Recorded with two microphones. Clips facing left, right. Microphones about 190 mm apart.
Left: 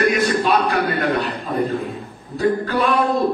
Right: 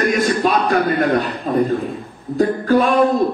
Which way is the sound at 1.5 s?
50° right (ahead or behind).